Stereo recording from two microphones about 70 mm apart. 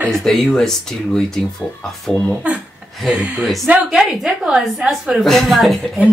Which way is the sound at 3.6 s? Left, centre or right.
Centre.